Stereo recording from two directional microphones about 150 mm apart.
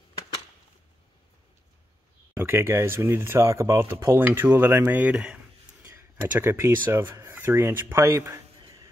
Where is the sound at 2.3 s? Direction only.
15° right (ahead or behind).